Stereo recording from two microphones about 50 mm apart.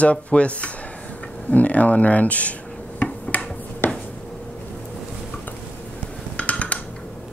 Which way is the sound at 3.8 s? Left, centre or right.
Left.